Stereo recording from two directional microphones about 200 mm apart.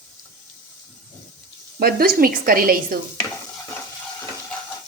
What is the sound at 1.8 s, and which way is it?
A woman's voice, 45° right (ahead or behind).